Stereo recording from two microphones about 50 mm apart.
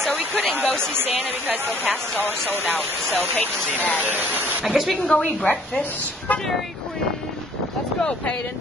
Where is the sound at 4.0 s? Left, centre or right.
Right.